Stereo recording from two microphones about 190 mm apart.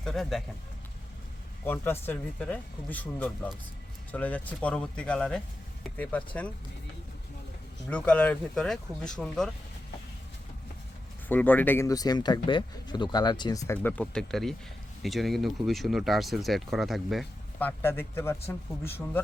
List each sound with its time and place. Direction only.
0.0 s speech: centre (ahead or behind)
1.6 s speech: 10° left (ahead or behind)
7.9 s speech: 5° left (ahead or behind)
11.3 s speech: 10° left (ahead or behind)